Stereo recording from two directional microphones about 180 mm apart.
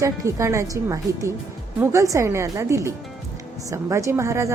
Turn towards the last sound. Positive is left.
turn(degrees=-15)  # may be behind; listen again after turning